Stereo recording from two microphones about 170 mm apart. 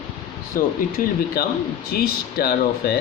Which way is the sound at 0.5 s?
55° left (ahead or behind).